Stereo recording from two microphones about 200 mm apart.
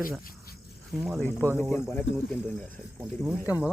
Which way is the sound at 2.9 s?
Centre (ahead or behind).